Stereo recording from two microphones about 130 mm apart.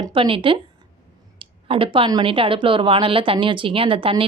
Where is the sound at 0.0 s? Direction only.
40° right (ahead or behind).